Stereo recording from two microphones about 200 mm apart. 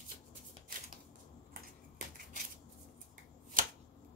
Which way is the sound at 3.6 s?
45° right (ahead or behind).